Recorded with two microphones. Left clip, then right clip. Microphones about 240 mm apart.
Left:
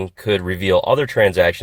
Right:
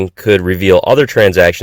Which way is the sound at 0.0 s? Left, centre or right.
Right.